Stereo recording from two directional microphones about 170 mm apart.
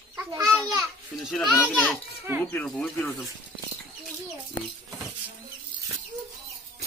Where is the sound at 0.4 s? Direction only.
Centre (ahead or behind).